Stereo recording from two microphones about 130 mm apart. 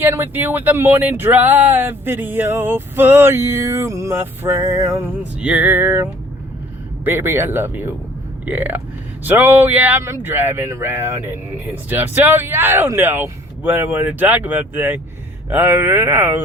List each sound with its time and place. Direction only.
0.0 s speech: 15° right (ahead or behind)
5.4 s speech: 10° right (ahead or behind)